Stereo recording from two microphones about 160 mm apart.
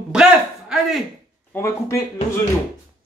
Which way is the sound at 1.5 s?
15° left (ahead or behind).